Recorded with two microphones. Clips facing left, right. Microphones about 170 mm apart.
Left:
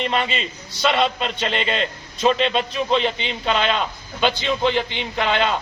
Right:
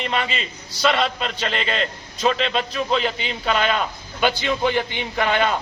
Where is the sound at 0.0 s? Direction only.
Centre (ahead or behind).